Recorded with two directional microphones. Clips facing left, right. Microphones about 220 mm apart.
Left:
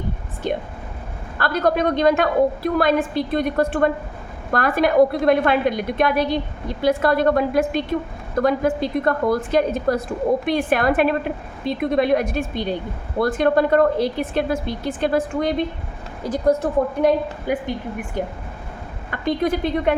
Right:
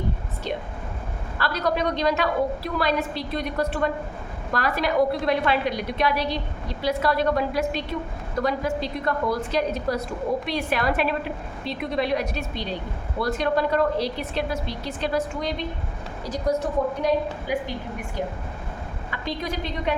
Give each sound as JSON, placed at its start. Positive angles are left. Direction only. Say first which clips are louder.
{"t": 0.4, "sound": "a woman's voice", "louder": "left 6 dB", "side_deg": 50}